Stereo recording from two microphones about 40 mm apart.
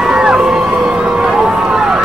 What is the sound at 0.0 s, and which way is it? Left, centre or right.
Crowd, centre.